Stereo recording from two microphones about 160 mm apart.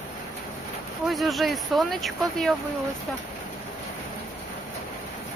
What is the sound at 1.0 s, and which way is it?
Speech, centre (ahead or behind).